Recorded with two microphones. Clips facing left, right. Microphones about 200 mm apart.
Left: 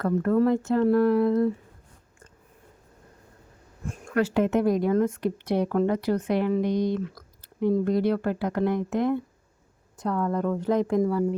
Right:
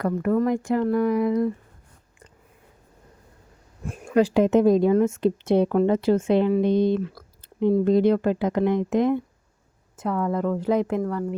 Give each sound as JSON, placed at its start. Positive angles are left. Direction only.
{"t": 0.4, "sound": "speech", "side_deg": -15}
{"t": 0.8, "sound": "a woman's voice", "side_deg": 0}
{"t": 4.1, "sound": "speech", "side_deg": -15}
{"t": 10.0, "sound": "a woman's voice", "side_deg": -5}
{"t": 11.0, "sound": "a woman's voice", "side_deg": 5}